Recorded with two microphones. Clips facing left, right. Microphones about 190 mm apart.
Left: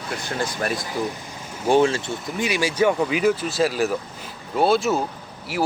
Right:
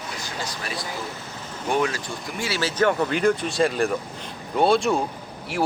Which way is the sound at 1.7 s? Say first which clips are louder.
Left 6 dB; 30° left (ahead or behind).